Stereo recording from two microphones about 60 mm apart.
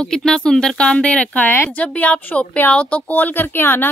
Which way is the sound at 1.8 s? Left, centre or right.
Left.